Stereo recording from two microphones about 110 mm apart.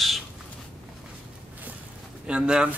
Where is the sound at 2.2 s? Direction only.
10° right (ahead or behind).